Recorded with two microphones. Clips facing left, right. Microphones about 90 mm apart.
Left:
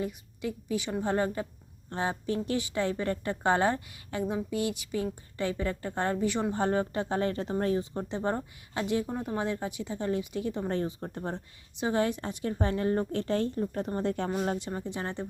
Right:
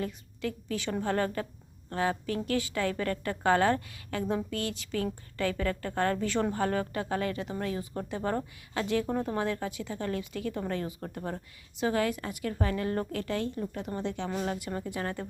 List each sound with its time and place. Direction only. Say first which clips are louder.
0.0 s a woman's voice: even; 15° left (ahead or behind); by 14.3 s 45° left (ahead or behind)
14.4 s a woman's voice: left 2 dB; 30° left (ahead or behind)